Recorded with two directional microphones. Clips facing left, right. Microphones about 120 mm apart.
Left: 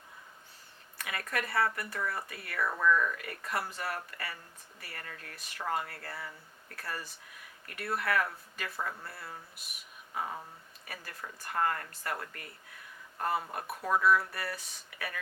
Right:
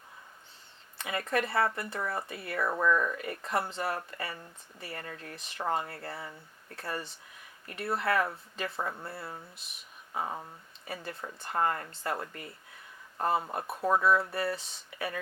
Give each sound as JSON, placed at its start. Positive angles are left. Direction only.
{"t": 0.9, "sound": "speech", "side_deg": -25}